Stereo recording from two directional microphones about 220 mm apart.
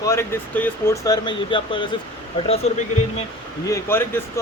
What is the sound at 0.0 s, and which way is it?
Speech, 15° left (ahead or behind).